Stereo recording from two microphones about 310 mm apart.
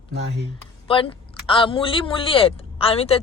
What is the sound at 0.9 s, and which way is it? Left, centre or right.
Speech, centre.